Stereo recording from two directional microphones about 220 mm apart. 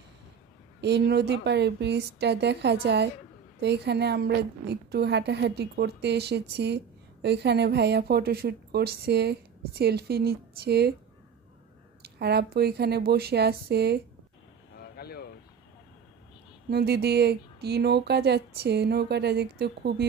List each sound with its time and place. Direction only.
0.7 s a woman's voice: 50° right (ahead or behind)
12.0 s a woman's voice: 45° right (ahead or behind)
14.8 s a sound: 45° left (ahead or behind)
16.7 s a woman's voice: 45° right (ahead or behind)